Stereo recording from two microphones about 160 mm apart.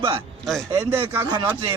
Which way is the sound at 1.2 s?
30° right (ahead or behind).